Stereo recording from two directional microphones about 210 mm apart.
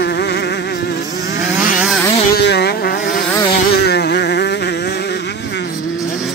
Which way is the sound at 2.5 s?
50° left (ahead or behind).